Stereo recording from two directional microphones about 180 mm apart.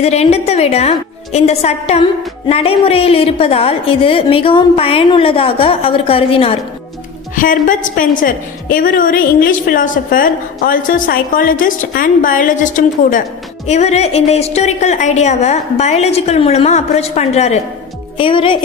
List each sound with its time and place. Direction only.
0.0 s a woman's voice: 35° left (ahead or behind)
7.3 s a woman's voice: 50° left (ahead or behind); by 18.6 s 30° left (ahead or behind)